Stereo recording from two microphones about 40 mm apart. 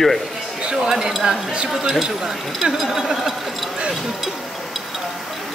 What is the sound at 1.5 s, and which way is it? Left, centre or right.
Speech, right.